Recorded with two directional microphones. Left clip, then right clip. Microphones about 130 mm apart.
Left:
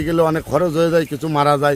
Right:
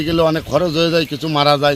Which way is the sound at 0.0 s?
50° left (ahead or behind).